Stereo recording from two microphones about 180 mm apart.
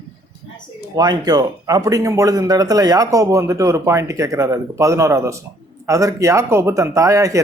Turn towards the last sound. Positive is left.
turn(degrees=-15)  # may be behind; listen again after turning